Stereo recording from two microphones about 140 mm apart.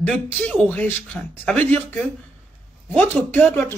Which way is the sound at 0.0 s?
5° left (ahead or behind).